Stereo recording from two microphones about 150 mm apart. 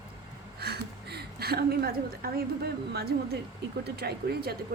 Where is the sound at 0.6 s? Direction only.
90° right.